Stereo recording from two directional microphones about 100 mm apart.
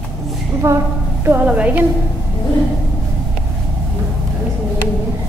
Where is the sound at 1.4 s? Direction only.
15° right (ahead or behind).